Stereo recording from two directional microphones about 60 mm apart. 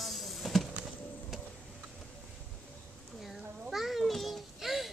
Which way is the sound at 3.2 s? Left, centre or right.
Centre.